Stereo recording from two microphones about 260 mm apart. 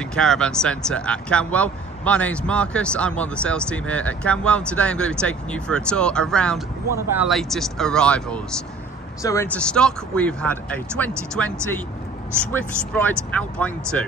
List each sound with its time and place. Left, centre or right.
0.0 s speech: centre